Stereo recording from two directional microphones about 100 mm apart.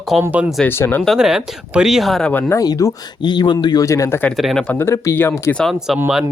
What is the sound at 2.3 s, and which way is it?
Speech, 20° left (ahead or behind).